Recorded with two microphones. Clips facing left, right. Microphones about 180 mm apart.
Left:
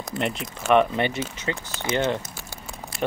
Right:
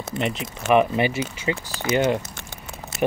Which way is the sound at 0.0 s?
Centre (ahead or behind).